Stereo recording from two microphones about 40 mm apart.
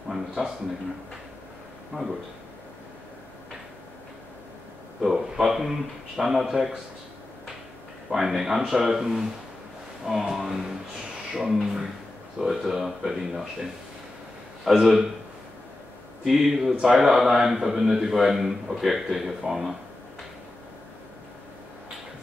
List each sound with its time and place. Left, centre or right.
0.1 s a sound: centre
1.9 s speech: centre
5.0 s speech: centre
8.1 s speech: centre
10.3 s speech: centre
14.6 s speech: centre
16.3 s speech: centre